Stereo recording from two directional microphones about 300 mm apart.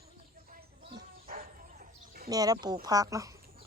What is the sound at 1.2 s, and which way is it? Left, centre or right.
Dog, right.